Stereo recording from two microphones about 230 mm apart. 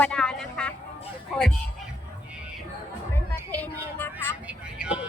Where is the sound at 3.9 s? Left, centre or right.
Centre.